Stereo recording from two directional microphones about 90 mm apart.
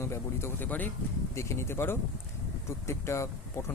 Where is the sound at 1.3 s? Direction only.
30° left (ahead or behind).